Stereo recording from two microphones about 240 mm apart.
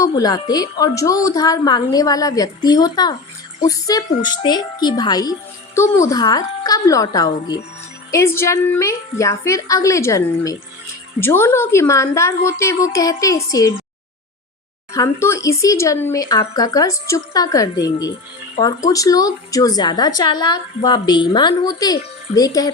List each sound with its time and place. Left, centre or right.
0.0 s a woman's voice: centre
14.9 s a woman's voice: centre